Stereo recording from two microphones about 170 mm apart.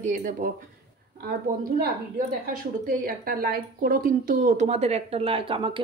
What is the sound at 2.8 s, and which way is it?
Speech, 60° right (ahead or behind).